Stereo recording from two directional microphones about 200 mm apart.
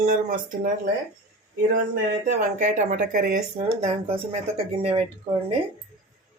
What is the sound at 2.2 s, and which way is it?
Speech, 40° right (ahead or behind).